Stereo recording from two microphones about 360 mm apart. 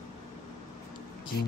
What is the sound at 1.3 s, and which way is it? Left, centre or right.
Speech, left.